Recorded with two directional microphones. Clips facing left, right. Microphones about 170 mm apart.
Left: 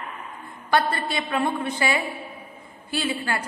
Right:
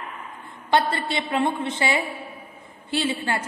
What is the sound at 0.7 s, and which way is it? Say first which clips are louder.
A woman's voice: right 1 dB; 25° right (ahead or behind).